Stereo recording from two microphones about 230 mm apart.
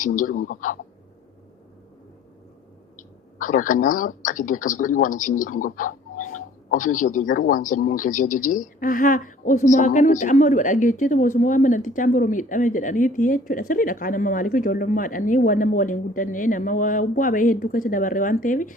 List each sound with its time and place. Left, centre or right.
0.0 s a man's voice: left
3.4 s a man's voice: left